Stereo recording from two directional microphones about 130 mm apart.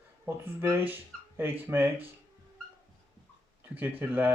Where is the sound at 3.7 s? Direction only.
15° right (ahead or behind).